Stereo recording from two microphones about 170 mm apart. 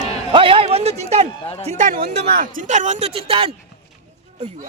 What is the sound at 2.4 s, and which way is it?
Speech, 50° right (ahead or behind).